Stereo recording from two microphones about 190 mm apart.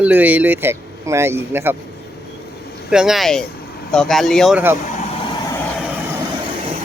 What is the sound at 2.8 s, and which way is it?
Speech, 5° right (ahead or behind).